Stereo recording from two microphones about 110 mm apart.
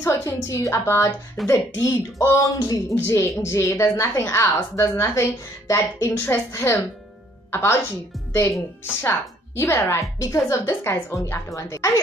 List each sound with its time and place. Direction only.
0.1 s a woman's voice: 30° left (ahead or behind)
9.6 s a woman's voice: 25° left (ahead or behind)